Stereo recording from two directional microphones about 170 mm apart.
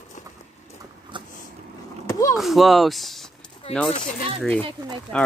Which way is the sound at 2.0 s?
20° left (ahead or behind).